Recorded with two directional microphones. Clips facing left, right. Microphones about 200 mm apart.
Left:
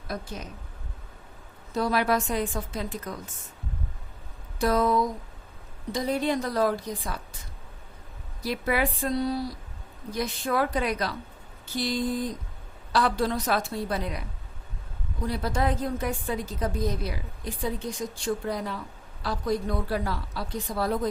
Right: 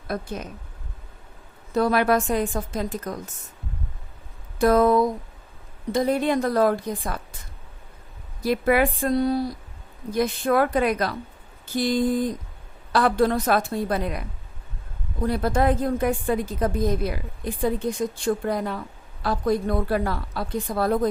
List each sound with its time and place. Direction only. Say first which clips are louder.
0.1 s a woman's voice: right 5 dB; 55° right (ahead or behind)
1.7 s a woman's voice: right 5 dB; 55° right (ahead or behind)
4.5 s a woman's voice: right 6 dB; 55° right (ahead or behind)
8.4 s a woman's voice: right 7 dB; 55° right (ahead or behind)